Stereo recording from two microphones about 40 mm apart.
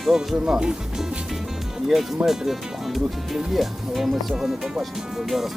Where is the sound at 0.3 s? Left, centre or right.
Centre.